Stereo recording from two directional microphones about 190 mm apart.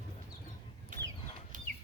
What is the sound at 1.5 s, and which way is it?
Chicken, 45° right (ahead or behind).